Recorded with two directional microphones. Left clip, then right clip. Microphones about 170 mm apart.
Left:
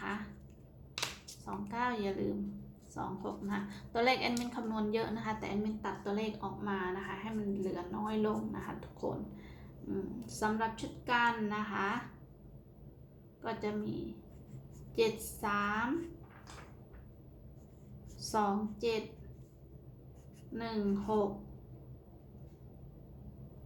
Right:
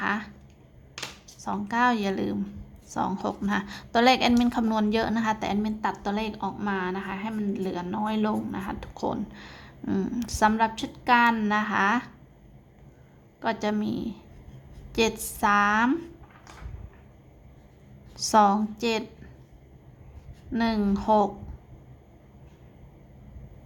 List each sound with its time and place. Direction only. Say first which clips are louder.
1.5 s a woman's voice: right 12 dB; 50° right (ahead or behind)
13.4 s a woman's voice: right 11 dB; 55° right (ahead or behind)
14.9 s a woman's voice: right 7 dB; 55° right (ahead or behind)
18.3 s a woman's voice: right 13 dB; 55° right (ahead or behind)
20.5 s a woman's voice: right 10 dB; 60° right (ahead or behind)